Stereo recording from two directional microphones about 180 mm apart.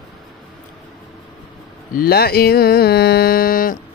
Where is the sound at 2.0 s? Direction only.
60° left (ahead or behind).